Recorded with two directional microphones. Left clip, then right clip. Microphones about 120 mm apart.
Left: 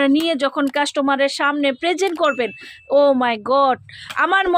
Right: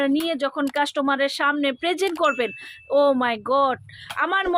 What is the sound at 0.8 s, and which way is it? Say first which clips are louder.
A woman's voice: left 3 dB; 30° left (ahead or behind).